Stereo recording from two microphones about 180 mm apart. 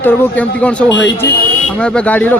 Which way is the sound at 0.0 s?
10° left (ahead or behind).